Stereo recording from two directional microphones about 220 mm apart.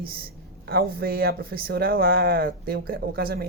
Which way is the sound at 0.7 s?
45° right (ahead or behind).